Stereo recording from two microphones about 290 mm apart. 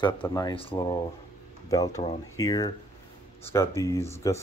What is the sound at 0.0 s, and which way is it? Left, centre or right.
Speech, centre.